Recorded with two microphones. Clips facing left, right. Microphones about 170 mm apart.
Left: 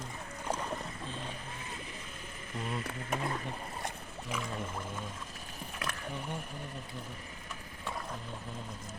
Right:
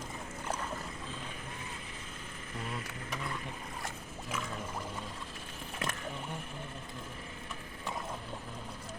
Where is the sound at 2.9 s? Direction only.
50° left (ahead or behind).